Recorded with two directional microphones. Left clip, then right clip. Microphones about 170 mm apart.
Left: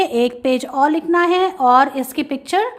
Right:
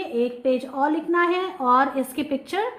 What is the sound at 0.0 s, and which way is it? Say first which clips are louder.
A woman's voice: left 7 dB; 45° left (ahead or behind).